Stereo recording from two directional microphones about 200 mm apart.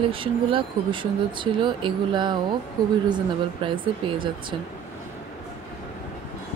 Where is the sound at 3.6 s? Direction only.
25° right (ahead or behind).